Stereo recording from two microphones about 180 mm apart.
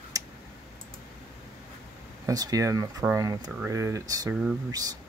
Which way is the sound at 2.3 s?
20° right (ahead or behind).